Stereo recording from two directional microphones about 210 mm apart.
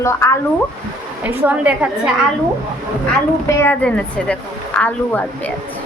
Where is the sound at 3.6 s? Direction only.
5° left (ahead or behind).